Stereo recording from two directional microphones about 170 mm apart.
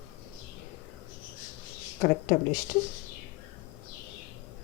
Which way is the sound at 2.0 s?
50° left (ahead or behind).